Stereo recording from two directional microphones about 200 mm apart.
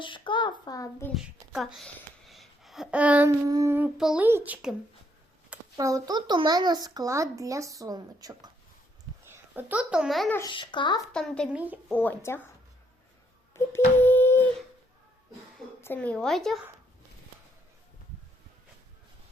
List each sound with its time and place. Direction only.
0.0 s a child's voice: 25° left (ahead or behind)
1.1 s speech: centre (ahead or behind)
5.7 s speech: 20° right (ahead or behind)
9.3 s a child's voice: 10° right (ahead or behind)
10.3 s a child's voice: 20° left (ahead or behind)
11.1 s speech: 5° left (ahead or behind)
13.5 s a sound: 10° left (ahead or behind)
15.8 s speech: 10° left (ahead or behind)